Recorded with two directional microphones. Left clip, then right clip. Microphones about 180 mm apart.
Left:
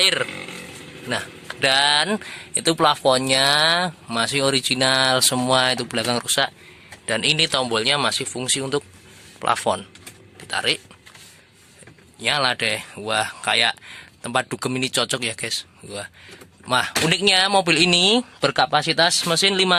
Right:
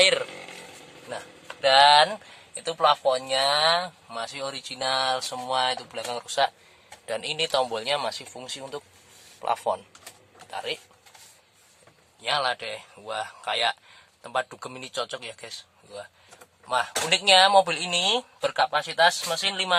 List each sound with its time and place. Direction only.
0.0 s a sound: centre (ahead or behind)
1.6 s speech: 15° left (ahead or behind)
6.2 s speech: centre (ahead or behind)
12.2 s speech: 10° left (ahead or behind)
16.3 s a sound: 10° left (ahead or behind)
17.2 s speech: 10° left (ahead or behind); by 19.7 s 30° left (ahead or behind)